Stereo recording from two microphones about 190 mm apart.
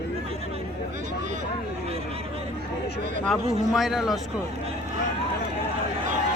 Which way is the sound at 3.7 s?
Centre (ahead or behind).